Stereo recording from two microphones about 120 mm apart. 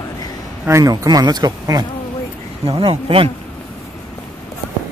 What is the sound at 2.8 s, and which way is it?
Speech, 50° right (ahead or behind).